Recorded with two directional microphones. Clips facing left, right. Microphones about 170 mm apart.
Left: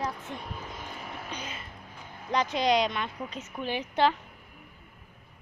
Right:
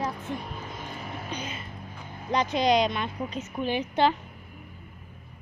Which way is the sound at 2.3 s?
30° right (ahead or behind).